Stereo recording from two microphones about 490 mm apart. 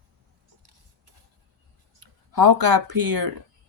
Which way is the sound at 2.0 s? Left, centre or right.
Right.